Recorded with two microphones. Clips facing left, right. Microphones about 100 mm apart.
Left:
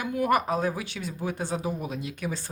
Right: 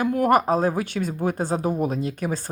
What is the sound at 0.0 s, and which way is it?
Speech, 45° right (ahead or behind).